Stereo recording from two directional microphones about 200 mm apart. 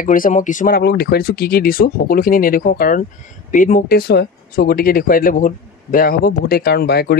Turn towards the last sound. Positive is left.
turn(degrees=50)  # may be behind; listen again after turning